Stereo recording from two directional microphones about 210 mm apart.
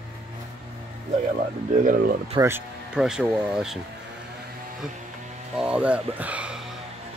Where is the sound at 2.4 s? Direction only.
10° right (ahead or behind).